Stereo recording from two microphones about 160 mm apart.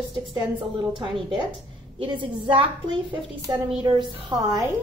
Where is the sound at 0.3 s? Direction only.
30° right (ahead or behind).